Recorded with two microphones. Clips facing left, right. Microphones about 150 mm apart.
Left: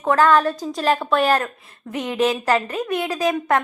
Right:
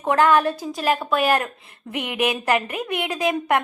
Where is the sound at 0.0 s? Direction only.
15° right (ahead or behind).